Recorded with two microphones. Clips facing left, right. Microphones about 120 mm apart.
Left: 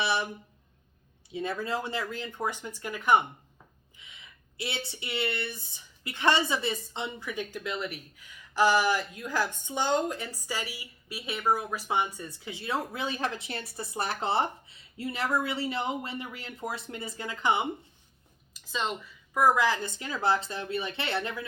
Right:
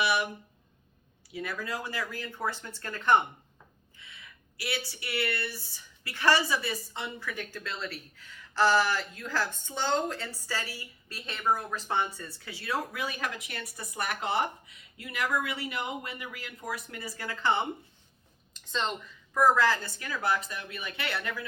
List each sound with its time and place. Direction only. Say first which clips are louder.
0.0 s speech: right 1 dB; 30° left (ahead or behind)
1.3 s speech: left 4 dB; 25° left (ahead or behind)